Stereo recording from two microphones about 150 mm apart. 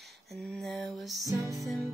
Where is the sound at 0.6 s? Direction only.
Centre (ahead or behind).